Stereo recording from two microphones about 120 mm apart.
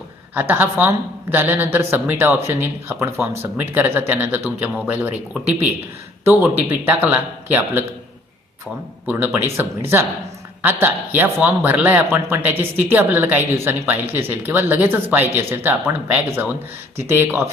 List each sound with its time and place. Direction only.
0.3 s a woman's voice: 15° right (ahead or behind)
6.2 s a woman's voice: 20° right (ahead or behind)
9.0 s a woman's voice: 20° right (ahead or behind)